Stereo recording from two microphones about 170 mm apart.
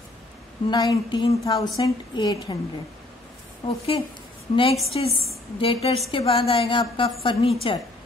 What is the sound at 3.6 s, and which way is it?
A woman's voice, 35° left (ahead or behind).